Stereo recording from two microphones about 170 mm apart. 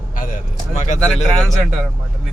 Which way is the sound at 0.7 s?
45° left (ahead or behind).